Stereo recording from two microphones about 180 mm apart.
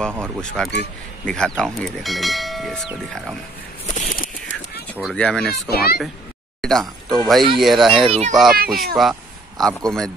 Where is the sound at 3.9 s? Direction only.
50° left (ahead or behind).